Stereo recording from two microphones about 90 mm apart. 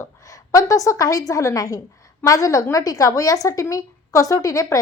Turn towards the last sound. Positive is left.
turn(degrees=40)  # may be behind; listen again after turning